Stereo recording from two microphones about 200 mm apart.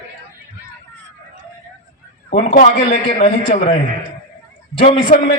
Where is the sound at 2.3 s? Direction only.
45° left (ahead or behind).